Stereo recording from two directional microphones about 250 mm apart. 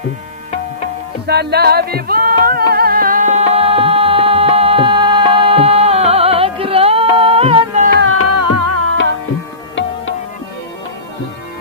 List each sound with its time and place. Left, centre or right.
1.3 s music: right
7.9 s music: right
8.3 s music: right